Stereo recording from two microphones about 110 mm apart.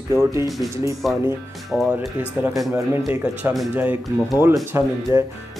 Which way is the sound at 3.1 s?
15° right (ahead or behind).